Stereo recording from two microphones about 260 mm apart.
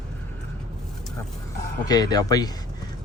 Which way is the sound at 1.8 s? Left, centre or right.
Centre.